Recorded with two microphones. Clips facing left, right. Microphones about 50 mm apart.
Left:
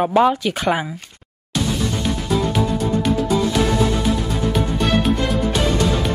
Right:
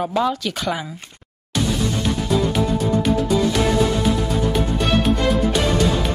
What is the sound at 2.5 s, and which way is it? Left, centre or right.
Music, centre.